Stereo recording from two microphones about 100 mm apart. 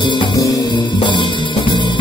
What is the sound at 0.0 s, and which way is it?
Music, 50° left (ahead or behind).